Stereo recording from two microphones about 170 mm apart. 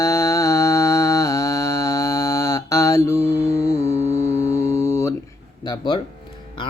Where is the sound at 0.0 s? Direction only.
15° left (ahead or behind).